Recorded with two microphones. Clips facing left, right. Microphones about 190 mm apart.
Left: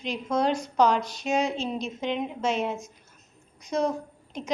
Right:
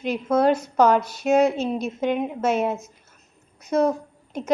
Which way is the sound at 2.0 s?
55° right (ahead or behind).